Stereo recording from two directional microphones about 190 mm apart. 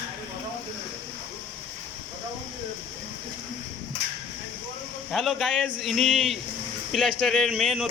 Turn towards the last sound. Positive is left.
turn(degrees=0)  # may be behind; listen again after turning